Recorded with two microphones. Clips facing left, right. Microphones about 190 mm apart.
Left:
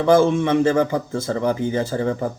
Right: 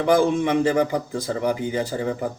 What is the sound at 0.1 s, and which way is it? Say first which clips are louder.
A man's voice: left 3 dB; 15° right (ahead or behind).